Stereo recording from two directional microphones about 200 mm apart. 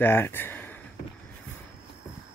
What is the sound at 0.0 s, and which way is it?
Speech, 10° left (ahead or behind).